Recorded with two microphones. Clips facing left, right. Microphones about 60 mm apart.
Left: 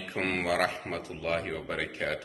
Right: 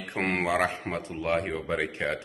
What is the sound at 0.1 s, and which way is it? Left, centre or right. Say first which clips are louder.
A man's voice: right 3 dB; right.